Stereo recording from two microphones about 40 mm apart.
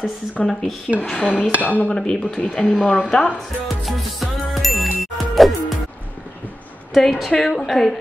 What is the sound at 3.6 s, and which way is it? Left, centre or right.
Music, centre.